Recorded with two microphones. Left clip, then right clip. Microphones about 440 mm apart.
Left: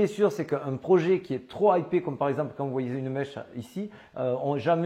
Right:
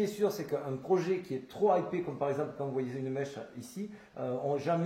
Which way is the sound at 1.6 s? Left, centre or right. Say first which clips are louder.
Left 6 dB; left.